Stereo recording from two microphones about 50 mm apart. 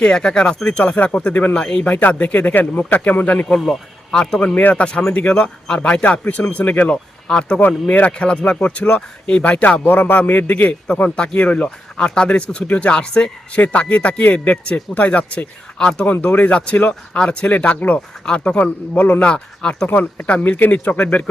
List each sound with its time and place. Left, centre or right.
0.0 s speech: centre
3.7 s speech: centre
5.6 s a man's voice: centre
5.9 s speech: left
6.9 s speech: centre
9.8 s speech: left
10.2 s a man's voice: left
11.9 s speech: centre
18.6 s a man's voice: left
19.3 s speech: centre
19.9 s speech: left
20.5 s a man's voice: left